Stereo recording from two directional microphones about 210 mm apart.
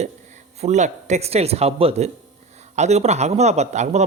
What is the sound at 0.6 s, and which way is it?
A man's voice, 35° right (ahead or behind).